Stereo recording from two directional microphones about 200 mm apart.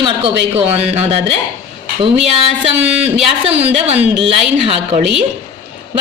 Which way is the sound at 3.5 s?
30° right (ahead or behind).